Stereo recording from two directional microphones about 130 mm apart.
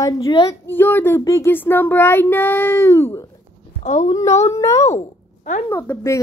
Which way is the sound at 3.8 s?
70° left (ahead or behind).